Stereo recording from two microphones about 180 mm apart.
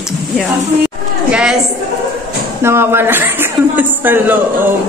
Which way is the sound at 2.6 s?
15° right (ahead or behind).